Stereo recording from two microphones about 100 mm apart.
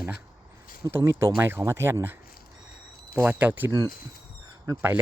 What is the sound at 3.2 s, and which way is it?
Speech, 15° right (ahead or behind).